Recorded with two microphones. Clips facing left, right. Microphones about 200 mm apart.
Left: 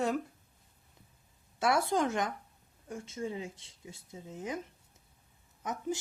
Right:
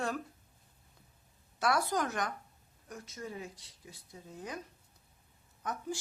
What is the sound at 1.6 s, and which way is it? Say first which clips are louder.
A woman's voice: left 3 dB; 25° left (ahead or behind).